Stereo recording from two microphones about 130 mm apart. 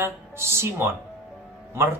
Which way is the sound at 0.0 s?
20° right (ahead or behind).